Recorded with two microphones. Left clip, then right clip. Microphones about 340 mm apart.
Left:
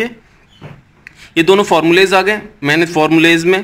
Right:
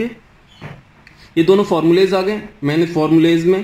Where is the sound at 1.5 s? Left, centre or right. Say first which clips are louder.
Left 3 dB; left.